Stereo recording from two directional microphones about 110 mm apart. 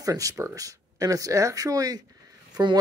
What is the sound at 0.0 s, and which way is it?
Speech, 30° right (ahead or behind).